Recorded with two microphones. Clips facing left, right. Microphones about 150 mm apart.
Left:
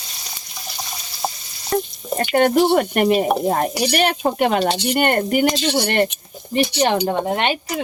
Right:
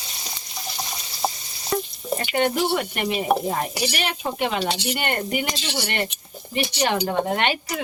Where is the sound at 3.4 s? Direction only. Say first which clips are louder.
Left 6 dB; 50° left (ahead or behind).